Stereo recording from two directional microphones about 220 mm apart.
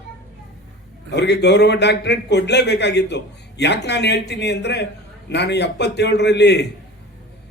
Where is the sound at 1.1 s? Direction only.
50° left (ahead or behind).